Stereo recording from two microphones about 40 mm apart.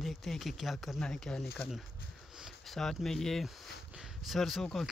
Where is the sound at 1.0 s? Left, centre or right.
Centre.